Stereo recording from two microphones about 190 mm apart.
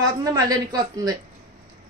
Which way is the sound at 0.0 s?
20° right (ahead or behind).